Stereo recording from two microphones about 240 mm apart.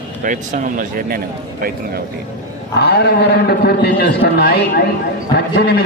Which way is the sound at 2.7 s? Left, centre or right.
Left.